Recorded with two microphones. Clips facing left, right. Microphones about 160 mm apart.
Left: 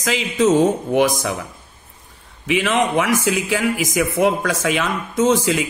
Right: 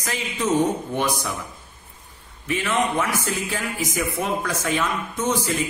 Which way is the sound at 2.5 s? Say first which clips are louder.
Left 5 dB; 90° left.